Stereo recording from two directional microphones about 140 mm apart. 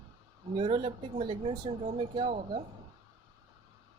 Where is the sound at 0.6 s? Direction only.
40° right (ahead or behind).